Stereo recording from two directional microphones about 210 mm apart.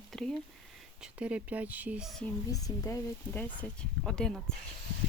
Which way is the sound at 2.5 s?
15° left (ahead or behind).